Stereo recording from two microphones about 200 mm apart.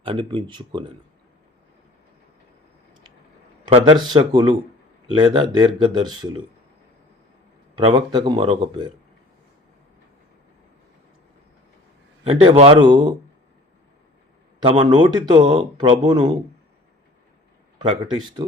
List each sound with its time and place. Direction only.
0.0 s a man's voice: 25° right (ahead or behind)
3.7 s a man's voice: 30° right (ahead or behind)
7.8 s a man's voice: 25° right (ahead or behind)
12.2 s a man's voice: 25° right (ahead or behind)
14.6 s a man's voice: 25° right (ahead or behind)
17.7 s a man's voice: 20° right (ahead or behind)